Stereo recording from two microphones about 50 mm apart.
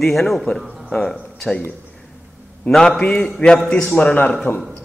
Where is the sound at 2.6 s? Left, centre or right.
Centre; by 4.3 s left.